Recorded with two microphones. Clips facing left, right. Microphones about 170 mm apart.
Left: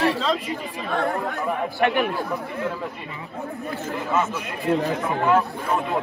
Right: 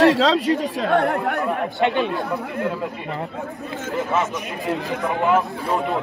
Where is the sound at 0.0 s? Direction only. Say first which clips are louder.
Right 7 dB; 80° right.